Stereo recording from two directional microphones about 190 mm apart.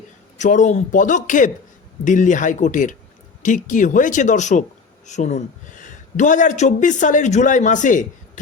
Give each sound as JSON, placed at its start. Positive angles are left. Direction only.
{"t": 0.3, "sound": "speech", "side_deg": 40}